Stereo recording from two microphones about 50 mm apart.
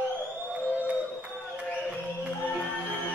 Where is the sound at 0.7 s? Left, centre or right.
Right.